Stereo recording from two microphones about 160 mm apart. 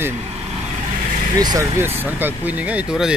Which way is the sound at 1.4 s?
20° right (ahead or behind).